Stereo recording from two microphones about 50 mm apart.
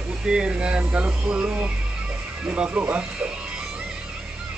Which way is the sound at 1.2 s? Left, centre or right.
Right.